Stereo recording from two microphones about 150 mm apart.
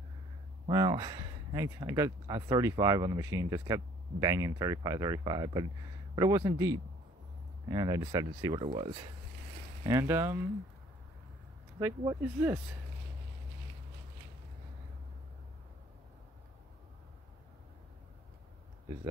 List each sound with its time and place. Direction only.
0.7 s speech: 25° right (ahead or behind)
8.5 s speech: 35° right (ahead or behind)
9.8 s speech: 20° right (ahead or behind)
12.2 s speech: 10° right (ahead or behind)